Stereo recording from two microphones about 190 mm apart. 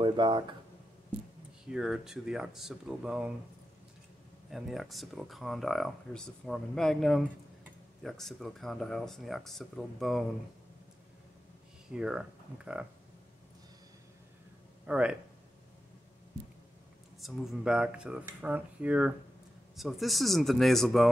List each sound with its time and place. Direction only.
0.0 s speech: 25° right (ahead or behind)
1.7 s speech: centre (ahead or behind)
4.5 s speech: centre (ahead or behind)
11.9 s speech: 5° right (ahead or behind)
14.9 s speech: 5° right (ahead or behind)
17.2 s speech: centre (ahead or behind)